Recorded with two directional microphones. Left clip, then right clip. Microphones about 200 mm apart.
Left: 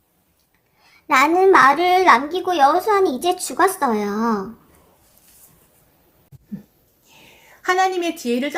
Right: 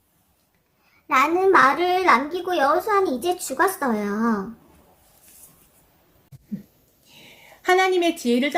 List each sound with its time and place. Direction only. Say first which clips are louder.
1.0 s a child's voice: left 4 dB; 35° left (ahead or behind)
7.6 s a woman's voice: even; 5° right (ahead or behind)